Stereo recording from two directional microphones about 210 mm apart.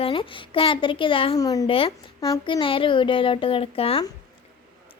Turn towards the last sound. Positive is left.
turn(degrees=25)  # may be behind; listen again after turning